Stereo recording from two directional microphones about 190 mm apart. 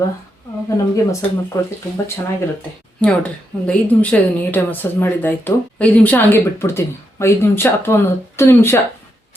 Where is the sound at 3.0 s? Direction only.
5° left (ahead or behind).